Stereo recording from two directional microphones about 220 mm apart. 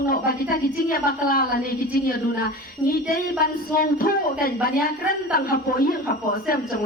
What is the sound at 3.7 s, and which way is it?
A man's voice, 40° left (ahead or behind).